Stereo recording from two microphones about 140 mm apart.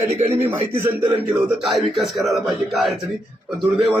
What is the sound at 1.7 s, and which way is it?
A man's voice, centre (ahead or behind).